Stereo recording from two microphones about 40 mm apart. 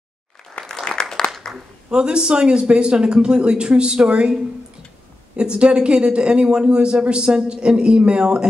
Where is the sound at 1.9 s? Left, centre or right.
Right.